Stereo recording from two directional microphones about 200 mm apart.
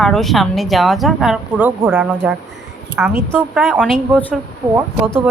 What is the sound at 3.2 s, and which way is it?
Speech, 5° left (ahead or behind).